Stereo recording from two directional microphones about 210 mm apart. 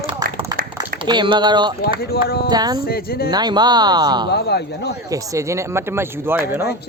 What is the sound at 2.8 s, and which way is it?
Speech, 45° left (ahead or behind).